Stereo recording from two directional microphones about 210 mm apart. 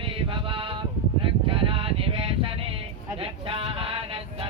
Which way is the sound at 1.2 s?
25° right (ahead or behind).